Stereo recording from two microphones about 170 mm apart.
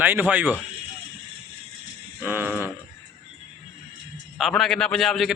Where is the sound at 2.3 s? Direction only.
10° right (ahead or behind).